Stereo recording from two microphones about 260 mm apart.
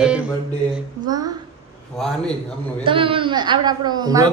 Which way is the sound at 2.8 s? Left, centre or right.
Centre.